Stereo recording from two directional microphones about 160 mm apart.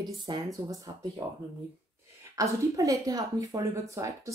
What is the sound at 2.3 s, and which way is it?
Speech, 20° right (ahead or behind).